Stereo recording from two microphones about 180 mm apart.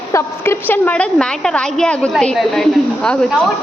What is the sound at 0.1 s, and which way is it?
A woman's voice, 10° left (ahead or behind).